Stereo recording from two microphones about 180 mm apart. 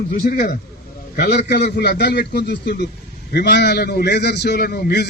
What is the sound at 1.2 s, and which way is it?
A man's voice, 70° left (ahead or behind).